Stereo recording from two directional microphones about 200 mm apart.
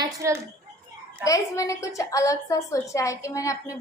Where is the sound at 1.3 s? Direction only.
15° left (ahead or behind).